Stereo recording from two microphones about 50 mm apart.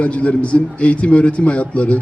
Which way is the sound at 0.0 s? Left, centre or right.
Left.